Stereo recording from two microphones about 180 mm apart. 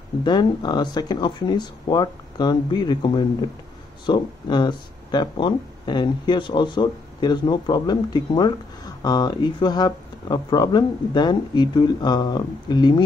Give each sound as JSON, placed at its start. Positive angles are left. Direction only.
{"t": 0.2, "sound": "speech", "side_deg": 25}